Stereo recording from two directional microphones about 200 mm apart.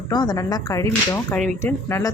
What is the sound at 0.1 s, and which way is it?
Speech, 20° left (ahead or behind).